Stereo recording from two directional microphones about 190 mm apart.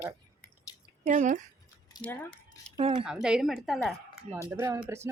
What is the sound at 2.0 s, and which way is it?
Speech, 10° left (ahead or behind).